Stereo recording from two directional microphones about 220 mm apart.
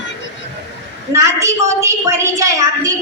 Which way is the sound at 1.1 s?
15° right (ahead or behind).